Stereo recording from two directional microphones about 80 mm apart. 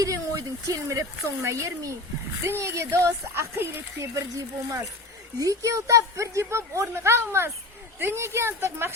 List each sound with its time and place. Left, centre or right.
0.0 s a woman's voice: right
4.1 s a woman's voice: right